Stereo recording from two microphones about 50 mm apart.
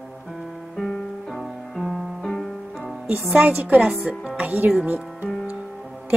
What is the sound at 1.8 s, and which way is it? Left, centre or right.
Music, centre.